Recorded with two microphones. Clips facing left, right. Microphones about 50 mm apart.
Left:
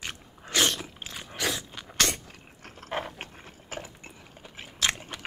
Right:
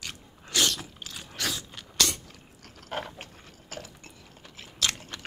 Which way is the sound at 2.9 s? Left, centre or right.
Left.